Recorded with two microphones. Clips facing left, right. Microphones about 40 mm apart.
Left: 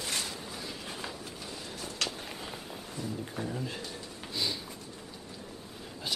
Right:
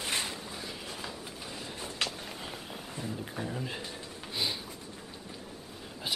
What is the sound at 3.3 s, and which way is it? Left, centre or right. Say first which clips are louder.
Speech: even; centre.